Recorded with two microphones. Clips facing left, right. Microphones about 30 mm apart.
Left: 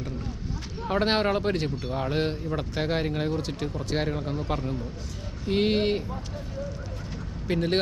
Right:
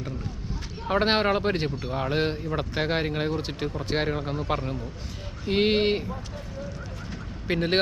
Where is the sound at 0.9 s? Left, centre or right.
Centre.